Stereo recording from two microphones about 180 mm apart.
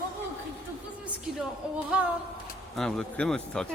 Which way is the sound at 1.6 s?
5° right (ahead or behind).